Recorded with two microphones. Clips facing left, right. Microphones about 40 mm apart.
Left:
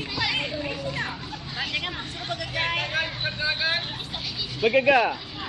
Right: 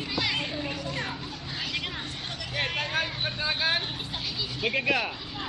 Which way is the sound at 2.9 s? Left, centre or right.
Centre.